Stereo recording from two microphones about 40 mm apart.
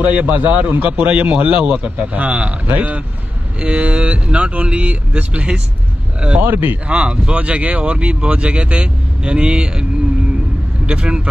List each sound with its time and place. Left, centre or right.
0.0 s speech: right
6.4 s speech: right
6.9 s speech: right
10.9 s speech: right